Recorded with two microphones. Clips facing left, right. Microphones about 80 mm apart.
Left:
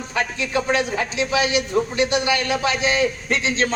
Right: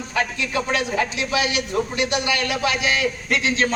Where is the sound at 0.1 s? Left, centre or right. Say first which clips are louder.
Left 1 dB; left.